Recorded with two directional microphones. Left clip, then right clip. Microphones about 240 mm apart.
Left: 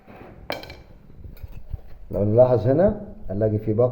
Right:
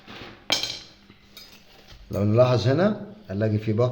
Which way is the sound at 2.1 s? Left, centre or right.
Centre.